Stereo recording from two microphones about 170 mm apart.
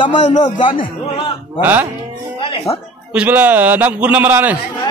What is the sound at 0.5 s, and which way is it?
Speech, 30° left (ahead or behind).